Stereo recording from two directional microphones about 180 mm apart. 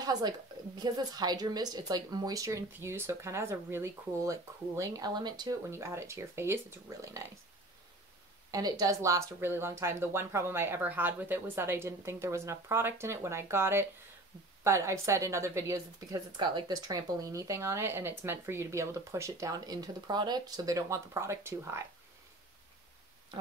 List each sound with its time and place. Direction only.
0.0 s a sound: 20° right (ahead or behind)
0.7 s a woman's voice: 20° right (ahead or behind)
8.5 s a woman's voice: 20° right (ahead or behind)